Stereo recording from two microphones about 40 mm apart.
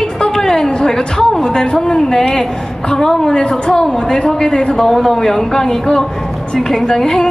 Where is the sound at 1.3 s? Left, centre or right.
Centre.